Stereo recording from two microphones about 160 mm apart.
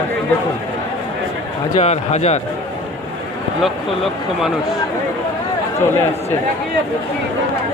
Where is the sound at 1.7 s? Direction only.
40° left (ahead or behind).